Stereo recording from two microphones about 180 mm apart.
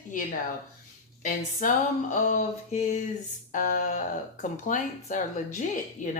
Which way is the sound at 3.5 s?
45° left (ahead or behind).